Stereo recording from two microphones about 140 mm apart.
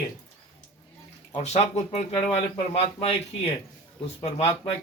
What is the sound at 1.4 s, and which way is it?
Speech, 50° left (ahead or behind).